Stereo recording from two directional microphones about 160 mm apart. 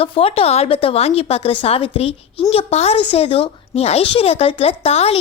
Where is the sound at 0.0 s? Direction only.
35° left (ahead or behind).